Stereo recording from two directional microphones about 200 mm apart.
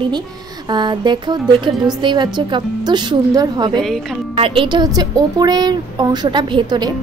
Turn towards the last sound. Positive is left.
turn(degrees=-20)  # may be behind; listen again after turning